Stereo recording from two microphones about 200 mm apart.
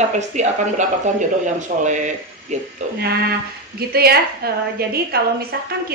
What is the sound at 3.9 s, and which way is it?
A woman's voice, 50° right (ahead or behind).